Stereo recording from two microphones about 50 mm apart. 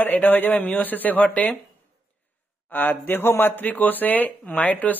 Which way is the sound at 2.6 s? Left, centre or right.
Left.